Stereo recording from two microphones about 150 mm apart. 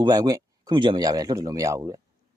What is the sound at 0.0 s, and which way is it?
Speech, 25° right (ahead or behind).